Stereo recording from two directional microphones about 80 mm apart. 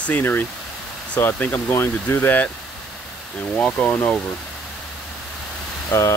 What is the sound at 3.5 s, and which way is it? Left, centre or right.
Speech, centre.